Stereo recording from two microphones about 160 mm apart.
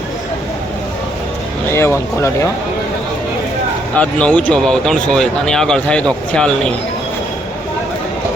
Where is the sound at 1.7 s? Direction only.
15° left (ahead or behind).